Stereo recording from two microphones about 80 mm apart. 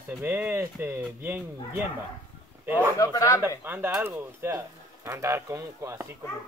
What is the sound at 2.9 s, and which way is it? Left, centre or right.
Speech, left.